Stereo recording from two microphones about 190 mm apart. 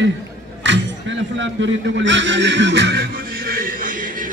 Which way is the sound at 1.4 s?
70° right (ahead or behind).